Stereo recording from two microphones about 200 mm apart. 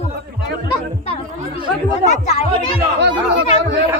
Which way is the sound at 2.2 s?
30° left (ahead or behind).